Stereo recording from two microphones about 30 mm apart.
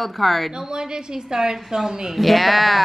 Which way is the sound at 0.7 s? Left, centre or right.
Right.